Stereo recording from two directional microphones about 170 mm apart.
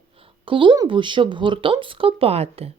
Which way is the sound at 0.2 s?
30° right (ahead or behind).